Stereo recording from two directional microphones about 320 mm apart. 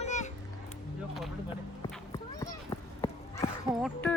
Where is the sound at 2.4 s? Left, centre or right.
Centre.